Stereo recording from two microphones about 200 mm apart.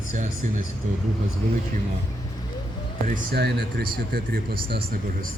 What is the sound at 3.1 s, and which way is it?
Speech, 55° right (ahead or behind).